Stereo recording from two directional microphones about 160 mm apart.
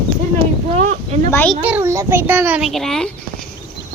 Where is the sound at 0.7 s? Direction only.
50° right (ahead or behind).